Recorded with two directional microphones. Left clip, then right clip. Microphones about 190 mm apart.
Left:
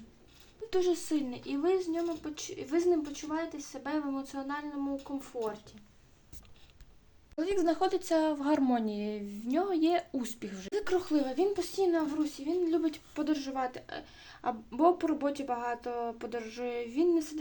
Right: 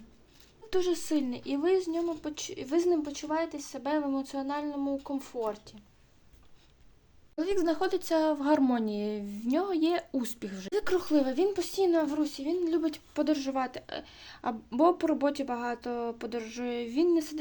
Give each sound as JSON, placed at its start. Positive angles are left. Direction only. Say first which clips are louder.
{"t": 0.7, "sound": "speech", "louder": "right 1 dB", "side_deg": -40}
{"t": 7.3, "sound": "speech", "louder": "right 1 dB", "side_deg": -25}